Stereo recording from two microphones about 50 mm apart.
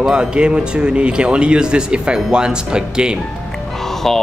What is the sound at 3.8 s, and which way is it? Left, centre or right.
Music, centre.